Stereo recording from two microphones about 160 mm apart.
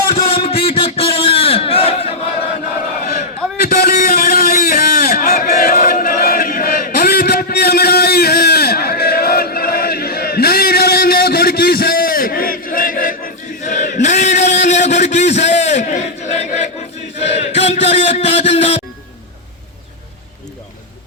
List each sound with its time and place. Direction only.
0.4 s battle cry: 40° left (ahead or behind)
3.6 s a sound: 70° left (ahead or behind); by 16.6 s 45° left (ahead or behind)
17.2 s chant: 40° left (ahead or behind)